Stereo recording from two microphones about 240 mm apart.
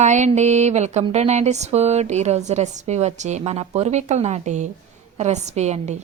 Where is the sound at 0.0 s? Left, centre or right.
Right.